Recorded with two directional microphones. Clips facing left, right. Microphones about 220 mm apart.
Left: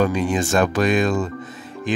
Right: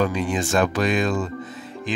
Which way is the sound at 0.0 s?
45° left (ahead or behind).